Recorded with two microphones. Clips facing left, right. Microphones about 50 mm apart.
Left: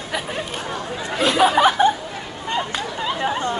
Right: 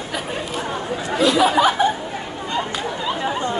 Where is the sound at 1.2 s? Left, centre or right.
Left.